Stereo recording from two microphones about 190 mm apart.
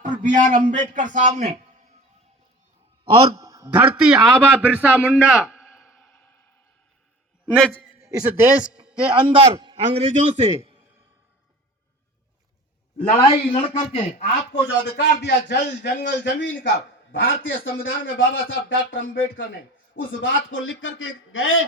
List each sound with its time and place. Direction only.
0.0 s a man's voice: 40° right (ahead or behind)
3.0 s a man's voice: 30° right (ahead or behind)
3.4 s a sound: 15° right (ahead or behind)
4.0 s a man's voice: 5° right (ahead or behind); by 6.5 s 10° left (ahead or behind)
8.0 s speech: 10° right (ahead or behind)
9.1 s a man's voice: 25° right (ahead or behind)
13.0 s a man's voice: 30° left (ahead or behind)
14.9 s a man's voice: 65° left (ahead or behind); by 21.5 s 90° left